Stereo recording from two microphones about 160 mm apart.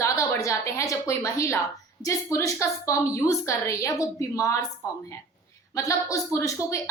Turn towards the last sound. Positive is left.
turn(degrees=20)  # may be behind; listen again after turning